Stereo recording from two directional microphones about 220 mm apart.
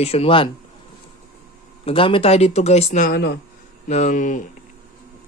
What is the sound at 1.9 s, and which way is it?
Speech, 25° left (ahead or behind).